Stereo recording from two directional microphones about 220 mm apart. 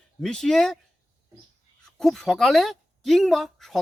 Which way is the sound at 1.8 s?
Centre (ahead or behind).